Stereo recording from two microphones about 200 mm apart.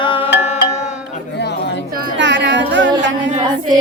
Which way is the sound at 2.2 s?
65° right (ahead or behind).